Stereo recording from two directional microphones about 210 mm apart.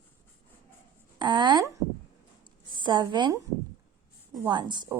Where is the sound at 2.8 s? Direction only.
20° right (ahead or behind).